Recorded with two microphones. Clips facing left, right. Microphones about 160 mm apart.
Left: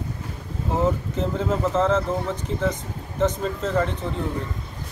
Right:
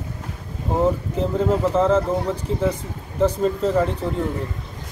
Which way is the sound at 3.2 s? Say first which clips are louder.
Right 4 dB; 30° right (ahead or behind).